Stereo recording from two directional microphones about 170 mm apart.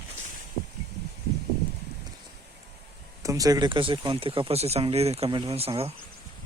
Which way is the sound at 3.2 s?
20° right (ahead or behind).